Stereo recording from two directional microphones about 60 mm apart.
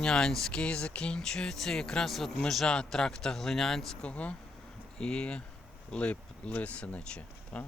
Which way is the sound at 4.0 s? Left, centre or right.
Left.